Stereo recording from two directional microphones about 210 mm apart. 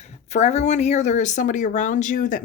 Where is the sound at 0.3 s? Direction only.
30° left (ahead or behind).